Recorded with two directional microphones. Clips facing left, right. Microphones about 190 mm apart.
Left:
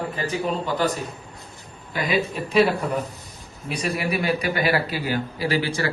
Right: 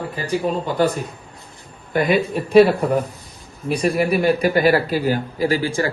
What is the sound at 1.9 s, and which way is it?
A man's voice, 55° right (ahead or behind).